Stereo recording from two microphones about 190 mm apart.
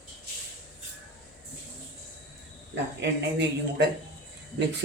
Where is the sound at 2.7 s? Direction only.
65° right (ahead or behind).